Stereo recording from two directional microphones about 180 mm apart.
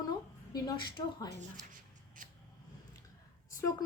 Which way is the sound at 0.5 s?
25° left (ahead or behind).